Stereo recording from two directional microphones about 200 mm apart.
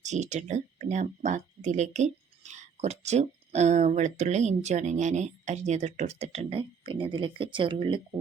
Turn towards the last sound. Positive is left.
turn(degrees=-25)  # may be behind; listen again after turning